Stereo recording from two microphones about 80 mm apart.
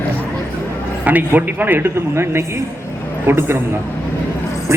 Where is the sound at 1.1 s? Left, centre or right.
Centre.